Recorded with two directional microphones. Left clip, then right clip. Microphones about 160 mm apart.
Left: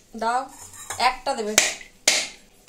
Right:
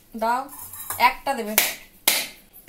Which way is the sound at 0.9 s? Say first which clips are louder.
Right 2 dB; 35° left (ahead or behind).